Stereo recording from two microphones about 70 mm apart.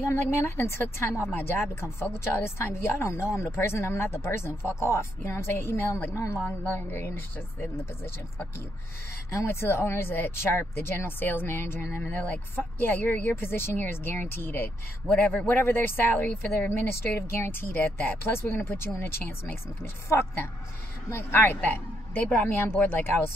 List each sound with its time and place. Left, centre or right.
0.0 s speech: left
6.1 s a woman's voice: left
6.7 s speech: left
15.0 s a woman's voice: left